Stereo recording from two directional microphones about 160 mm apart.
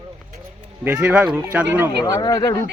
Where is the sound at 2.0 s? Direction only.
25° left (ahead or behind).